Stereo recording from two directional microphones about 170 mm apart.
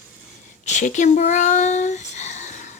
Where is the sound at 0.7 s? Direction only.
45° left (ahead or behind).